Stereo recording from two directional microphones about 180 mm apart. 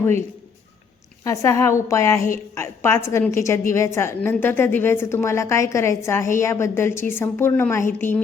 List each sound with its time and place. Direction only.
0.0 s a man's voice: 15° left (ahead or behind)